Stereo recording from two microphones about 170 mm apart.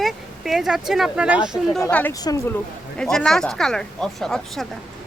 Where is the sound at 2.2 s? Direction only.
20° left (ahead or behind).